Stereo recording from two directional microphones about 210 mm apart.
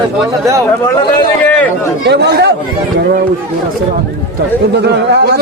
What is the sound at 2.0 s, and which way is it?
Speech, 55° right (ahead or behind).